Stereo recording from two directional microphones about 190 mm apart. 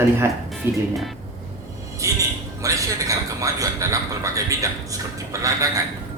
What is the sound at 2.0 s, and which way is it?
A man's voice, 15° right (ahead or behind).